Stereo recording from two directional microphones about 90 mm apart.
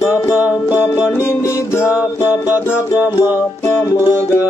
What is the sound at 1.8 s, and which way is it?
Music, 15° right (ahead or behind).